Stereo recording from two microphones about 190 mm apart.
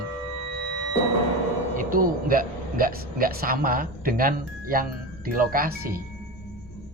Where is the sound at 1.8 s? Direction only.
45° right (ahead or behind).